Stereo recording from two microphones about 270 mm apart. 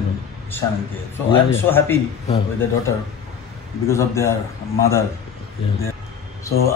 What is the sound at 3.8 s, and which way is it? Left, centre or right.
Speech, centre.